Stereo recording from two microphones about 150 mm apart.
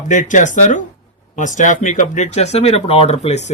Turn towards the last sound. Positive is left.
turn(degrees=45)  # may be behind; listen again after turning